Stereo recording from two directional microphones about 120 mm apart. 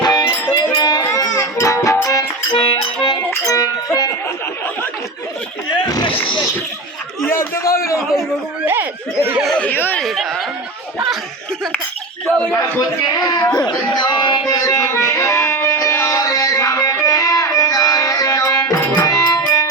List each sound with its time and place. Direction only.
0.0 s music: 35° left (ahead or behind)
2.5 s music: 50° left (ahead or behind)
3.2 s music: 25° left (ahead or behind)
5.9 s vehicle: 40° left (ahead or behind)
7.2 s a man's voice: 20° left (ahead or behind)
8.6 s speech: 15° right (ahead or behind)
9.4 s speech: 5° left (ahead or behind)
9.6 s speech: 15° left (ahead or behind)
10.0 s speech: centre (ahead or behind)
13.1 s speech: 35° left (ahead or behind)
14.0 s music: 40° left (ahead or behind)